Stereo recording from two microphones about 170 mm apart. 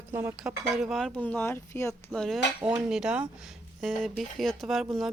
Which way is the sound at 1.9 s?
Centre (ahead or behind).